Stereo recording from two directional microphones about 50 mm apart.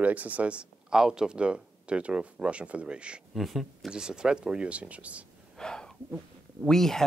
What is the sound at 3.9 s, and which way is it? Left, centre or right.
Speech, centre.